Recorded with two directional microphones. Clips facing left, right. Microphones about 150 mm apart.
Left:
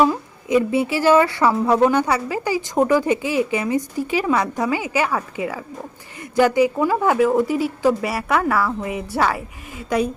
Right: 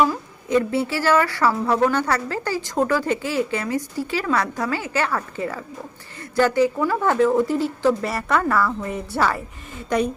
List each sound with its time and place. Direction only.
0.0 s a woman's voice: 15° left (ahead or behind)